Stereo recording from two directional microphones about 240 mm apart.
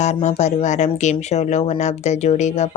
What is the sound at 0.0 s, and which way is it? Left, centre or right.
Speech, left.